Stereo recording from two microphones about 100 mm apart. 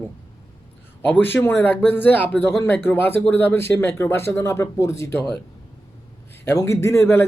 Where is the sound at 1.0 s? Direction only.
20° left (ahead or behind).